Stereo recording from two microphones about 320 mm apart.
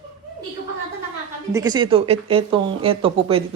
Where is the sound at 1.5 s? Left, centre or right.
Centre.